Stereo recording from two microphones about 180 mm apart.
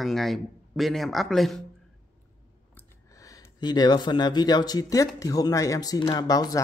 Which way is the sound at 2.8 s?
15° left (ahead or behind).